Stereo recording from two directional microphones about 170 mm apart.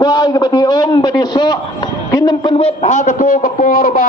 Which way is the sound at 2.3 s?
30° left (ahead or behind).